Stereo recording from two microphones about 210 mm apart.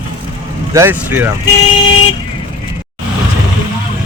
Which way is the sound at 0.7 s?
10° right (ahead or behind).